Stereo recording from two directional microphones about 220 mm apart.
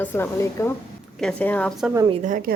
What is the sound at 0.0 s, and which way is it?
A woman's voice, 10° left (ahead or behind).